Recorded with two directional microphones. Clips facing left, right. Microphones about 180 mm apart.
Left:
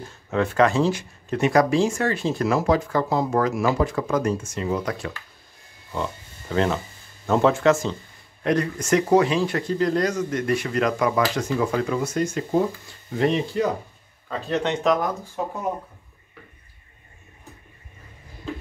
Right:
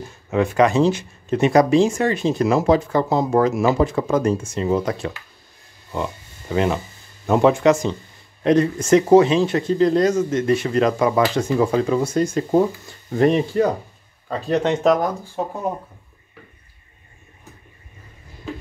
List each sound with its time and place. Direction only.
0.3 s speech: 15° right (ahead or behind)
5.9 s speech: 15° right (ahead or behind); by 12.4 s 30° right (ahead or behind)
13.2 s speech: 50° right (ahead or behind)